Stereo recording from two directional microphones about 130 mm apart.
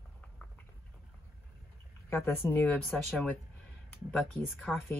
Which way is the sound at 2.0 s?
15° left (ahead or behind).